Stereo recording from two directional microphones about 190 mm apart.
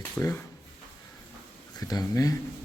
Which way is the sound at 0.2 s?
15° left (ahead or behind).